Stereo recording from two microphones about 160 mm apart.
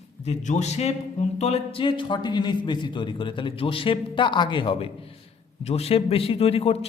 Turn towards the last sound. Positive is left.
turn(degrees=40)  # may be behind; listen again after turning